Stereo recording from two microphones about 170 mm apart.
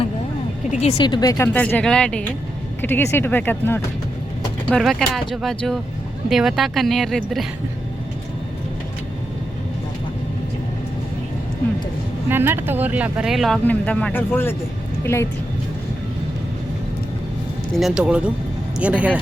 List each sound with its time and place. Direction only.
0.7 s speech: 40° left (ahead or behind)
0.9 s speech: 25° left (ahead or behind)
1.5 s speech: 10° left (ahead or behind)
12.3 s speech: 15° right (ahead or behind); by 15.3 s 15° left (ahead or behind)
17.7 s speech: 5° right (ahead or behind)